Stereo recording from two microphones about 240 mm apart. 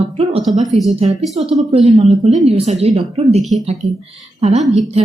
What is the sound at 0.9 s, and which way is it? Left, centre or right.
A woman's voice, right.